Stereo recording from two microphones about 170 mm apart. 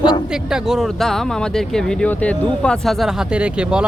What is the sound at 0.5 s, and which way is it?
Speech, centre (ahead or behind).